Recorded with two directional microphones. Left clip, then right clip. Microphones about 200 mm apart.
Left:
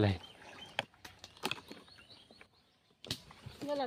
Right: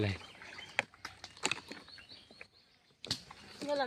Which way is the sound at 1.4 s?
45° left (ahead or behind).